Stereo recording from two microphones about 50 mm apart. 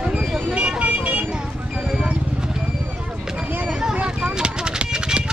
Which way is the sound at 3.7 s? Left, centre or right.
Centre.